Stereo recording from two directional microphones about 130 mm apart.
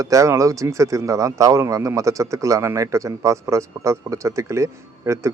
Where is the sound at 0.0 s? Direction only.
25° right (ahead or behind).